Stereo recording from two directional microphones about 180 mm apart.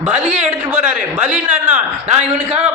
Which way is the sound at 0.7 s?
5° right (ahead or behind).